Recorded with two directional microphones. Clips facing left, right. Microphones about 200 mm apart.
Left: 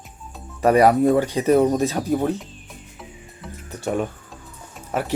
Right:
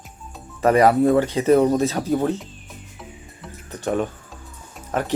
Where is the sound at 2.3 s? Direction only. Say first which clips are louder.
Even; centre (ahead or behind).